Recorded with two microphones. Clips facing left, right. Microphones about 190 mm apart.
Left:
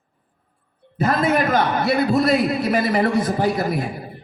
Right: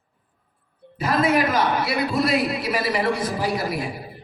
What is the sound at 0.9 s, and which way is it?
A man's voice, 45° left (ahead or behind).